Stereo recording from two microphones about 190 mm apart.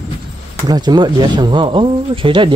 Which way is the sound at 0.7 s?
20° right (ahead or behind).